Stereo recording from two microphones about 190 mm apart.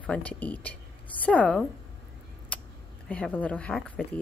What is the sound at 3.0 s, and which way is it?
Speech, 5° left (ahead or behind).